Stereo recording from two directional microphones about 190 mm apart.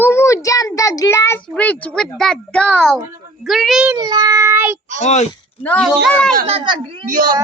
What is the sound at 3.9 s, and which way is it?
Speech, 20° right (ahead or behind).